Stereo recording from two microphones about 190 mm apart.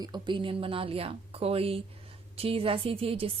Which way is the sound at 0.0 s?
25° right (ahead or behind).